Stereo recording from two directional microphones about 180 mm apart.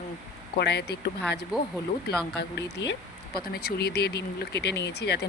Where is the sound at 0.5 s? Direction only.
65° left (ahead or behind).